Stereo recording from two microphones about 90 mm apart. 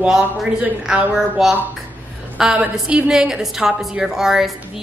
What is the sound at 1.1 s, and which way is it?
A woman's voice, 5° right (ahead or behind).